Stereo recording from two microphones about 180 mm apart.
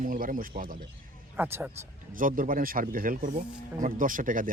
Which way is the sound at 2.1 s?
50° right (ahead or behind).